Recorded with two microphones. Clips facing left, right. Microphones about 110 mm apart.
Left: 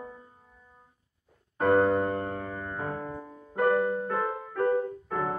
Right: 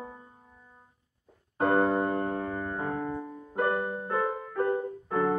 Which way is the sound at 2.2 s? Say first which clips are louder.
Right 3 dB; 10° right (ahead or behind).